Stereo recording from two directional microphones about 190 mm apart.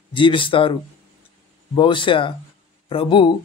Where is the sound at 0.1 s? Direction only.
25° left (ahead or behind).